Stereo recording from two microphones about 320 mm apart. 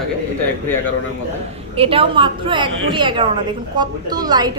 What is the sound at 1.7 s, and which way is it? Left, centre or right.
A woman's voice, centre.